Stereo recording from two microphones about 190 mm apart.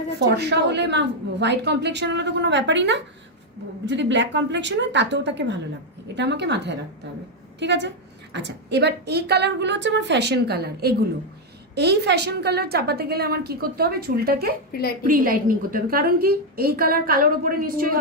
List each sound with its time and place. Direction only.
0.2 s a woman's voice: 60° right (ahead or behind)
14.7 s a woman's voice: 55° left (ahead or behind)
15.0 s a woman's voice: 45° right (ahead or behind)